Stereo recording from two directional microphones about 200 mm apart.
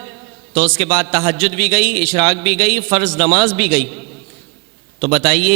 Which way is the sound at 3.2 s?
25° right (ahead or behind).